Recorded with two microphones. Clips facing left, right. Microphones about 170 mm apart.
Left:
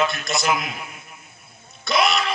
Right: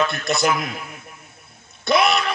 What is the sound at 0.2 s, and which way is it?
Speech, 60° right (ahead or behind).